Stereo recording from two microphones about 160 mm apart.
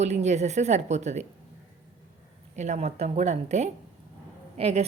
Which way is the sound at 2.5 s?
45° right (ahead or behind).